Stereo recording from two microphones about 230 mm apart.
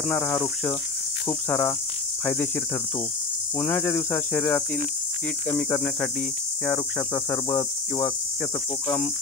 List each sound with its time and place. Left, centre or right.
0.1 s cricket: centre
3.5 s cricket: centre
7.2 s cricket: centre